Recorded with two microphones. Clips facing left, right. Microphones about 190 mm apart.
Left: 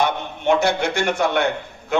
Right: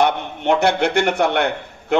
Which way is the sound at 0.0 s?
60° right (ahead or behind).